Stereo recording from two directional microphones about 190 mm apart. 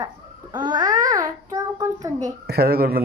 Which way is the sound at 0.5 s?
25° right (ahead or behind).